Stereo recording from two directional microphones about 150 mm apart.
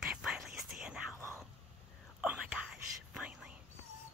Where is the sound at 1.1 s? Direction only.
15° left (ahead or behind).